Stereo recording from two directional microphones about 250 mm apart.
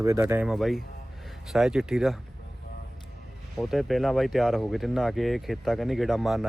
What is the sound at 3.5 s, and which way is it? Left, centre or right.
Speech, centre.